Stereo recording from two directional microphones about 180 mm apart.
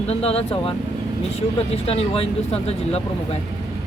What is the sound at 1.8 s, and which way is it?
Speech, 35° left (ahead or behind).